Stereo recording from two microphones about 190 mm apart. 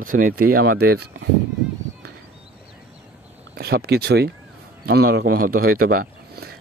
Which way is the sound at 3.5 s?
55° right (ahead or behind).